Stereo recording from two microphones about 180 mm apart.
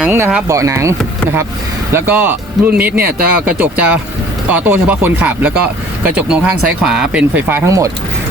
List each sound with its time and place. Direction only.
0.0 s speech: 10° right (ahead or behind)